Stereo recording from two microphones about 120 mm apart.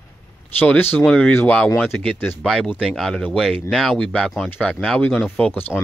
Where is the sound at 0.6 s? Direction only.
15° left (ahead or behind).